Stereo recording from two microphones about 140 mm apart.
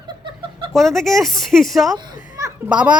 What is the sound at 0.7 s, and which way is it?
Speech, centre (ahead or behind).